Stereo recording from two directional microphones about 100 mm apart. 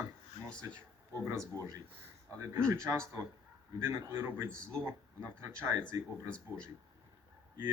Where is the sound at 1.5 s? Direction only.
35° right (ahead or behind).